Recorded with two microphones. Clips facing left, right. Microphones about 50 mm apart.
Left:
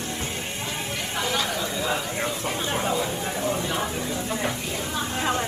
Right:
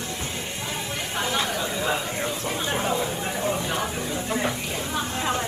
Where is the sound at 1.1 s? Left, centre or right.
Right.